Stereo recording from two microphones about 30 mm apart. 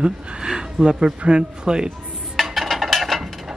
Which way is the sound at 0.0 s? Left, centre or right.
Right.